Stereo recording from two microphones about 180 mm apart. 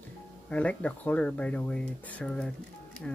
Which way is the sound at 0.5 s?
5° left (ahead or behind).